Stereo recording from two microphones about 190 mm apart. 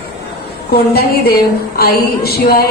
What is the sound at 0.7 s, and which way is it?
A woman's voice, 55° left (ahead or behind).